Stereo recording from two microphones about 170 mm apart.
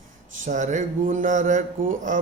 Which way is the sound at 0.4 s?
45° right (ahead or behind).